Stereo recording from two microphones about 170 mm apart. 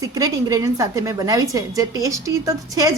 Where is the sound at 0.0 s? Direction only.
20° right (ahead or behind).